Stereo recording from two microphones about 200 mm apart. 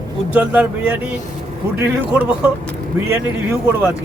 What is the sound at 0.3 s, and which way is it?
A man's voice, 10° right (ahead or behind).